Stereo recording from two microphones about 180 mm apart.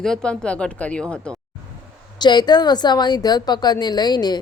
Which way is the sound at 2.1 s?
25° left (ahead or behind).